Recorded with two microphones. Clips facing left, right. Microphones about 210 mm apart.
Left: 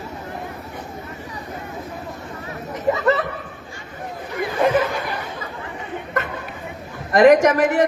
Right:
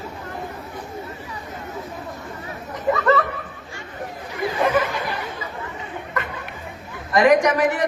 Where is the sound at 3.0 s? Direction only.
20° left (ahead or behind).